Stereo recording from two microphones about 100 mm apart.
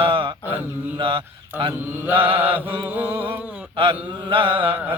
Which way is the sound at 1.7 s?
20° right (ahead or behind).